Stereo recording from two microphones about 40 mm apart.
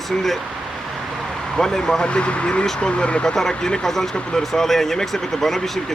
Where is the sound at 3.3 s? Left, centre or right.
Centre.